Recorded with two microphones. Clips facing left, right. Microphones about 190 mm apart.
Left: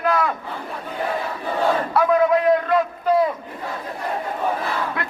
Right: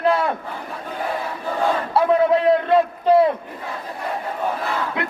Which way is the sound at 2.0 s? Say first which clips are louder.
Right 1 dB; 30° right (ahead or behind).